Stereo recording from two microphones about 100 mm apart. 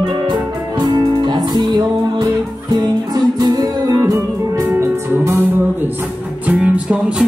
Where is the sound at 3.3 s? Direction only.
40° right (ahead or behind).